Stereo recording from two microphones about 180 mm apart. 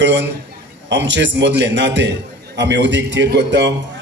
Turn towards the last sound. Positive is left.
turn(degrees=-80)